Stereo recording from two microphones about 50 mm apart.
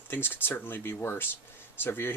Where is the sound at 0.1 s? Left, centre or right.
Left.